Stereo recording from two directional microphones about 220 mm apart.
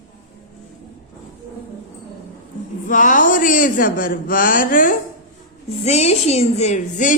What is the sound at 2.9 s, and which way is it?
Speech, 35° left (ahead or behind).